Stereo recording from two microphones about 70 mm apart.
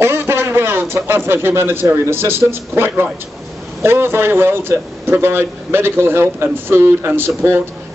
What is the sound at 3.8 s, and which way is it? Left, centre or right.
A man's voice, right.